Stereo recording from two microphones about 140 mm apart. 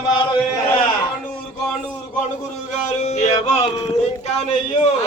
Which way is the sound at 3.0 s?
55° left (ahead or behind).